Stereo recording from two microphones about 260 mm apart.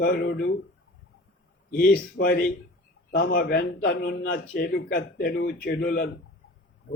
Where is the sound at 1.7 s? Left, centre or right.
Left.